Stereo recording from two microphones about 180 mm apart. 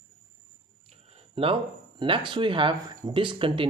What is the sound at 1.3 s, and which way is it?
Speech, 30° right (ahead or behind).